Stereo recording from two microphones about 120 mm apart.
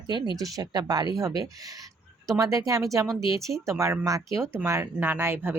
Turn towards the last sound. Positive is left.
turn(degrees=-20)  # may be behind; listen again after turning